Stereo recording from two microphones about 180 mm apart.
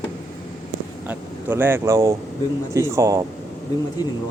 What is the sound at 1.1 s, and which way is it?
Speech, 10° right (ahead or behind).